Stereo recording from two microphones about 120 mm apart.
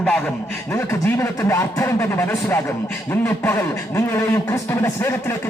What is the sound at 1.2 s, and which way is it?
A man's voice, 20° left (ahead or behind).